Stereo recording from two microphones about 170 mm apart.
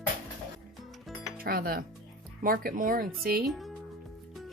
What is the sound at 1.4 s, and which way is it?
Speech, 60° right (ahead or behind).